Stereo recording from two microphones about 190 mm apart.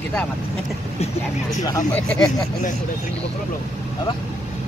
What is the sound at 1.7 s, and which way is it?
Speech, 10° left (ahead or behind).